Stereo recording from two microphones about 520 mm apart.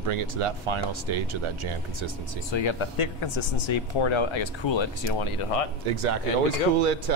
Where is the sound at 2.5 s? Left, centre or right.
Left.